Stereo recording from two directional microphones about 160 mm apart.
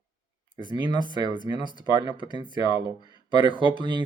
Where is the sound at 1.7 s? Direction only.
30° right (ahead or behind).